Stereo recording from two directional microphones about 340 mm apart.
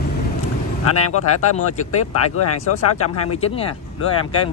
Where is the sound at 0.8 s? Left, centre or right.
Left.